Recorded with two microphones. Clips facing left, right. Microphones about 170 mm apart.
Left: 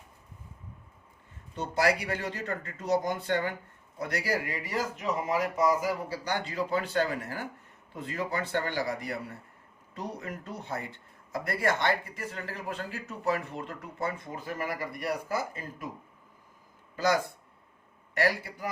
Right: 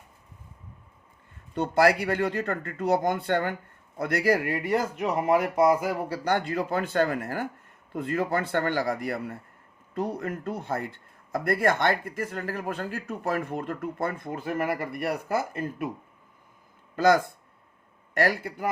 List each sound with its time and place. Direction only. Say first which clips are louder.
1.5 s speech: right 6 dB; 60° right (ahead or behind)
16.9 s speech: right 6 dB; 55° right (ahead or behind)